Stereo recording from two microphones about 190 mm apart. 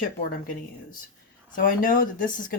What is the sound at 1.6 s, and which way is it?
Speech, 45° left (ahead or behind).